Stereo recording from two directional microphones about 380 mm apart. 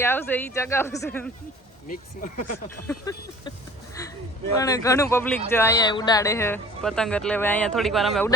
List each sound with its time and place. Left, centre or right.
0.0 s speech: centre
1.9 s speech: left
2.8 s speech: centre
4.5 s speech: centre